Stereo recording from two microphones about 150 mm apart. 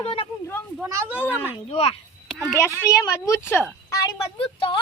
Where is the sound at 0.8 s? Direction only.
10° right (ahead or behind).